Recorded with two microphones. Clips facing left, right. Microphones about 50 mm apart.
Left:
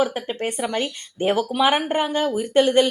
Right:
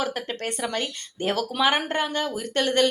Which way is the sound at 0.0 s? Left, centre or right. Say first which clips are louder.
Left 5 dB; centre.